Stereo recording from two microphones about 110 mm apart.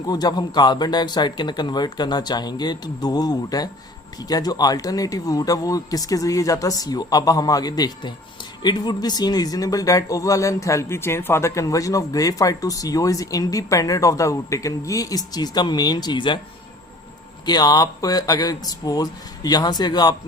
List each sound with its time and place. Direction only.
0.0 s speech: 35° left (ahead or behind)
17.4 s speech: 40° left (ahead or behind)